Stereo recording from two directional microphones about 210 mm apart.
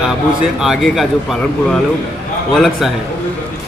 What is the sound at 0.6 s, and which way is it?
Speech, centre (ahead or behind).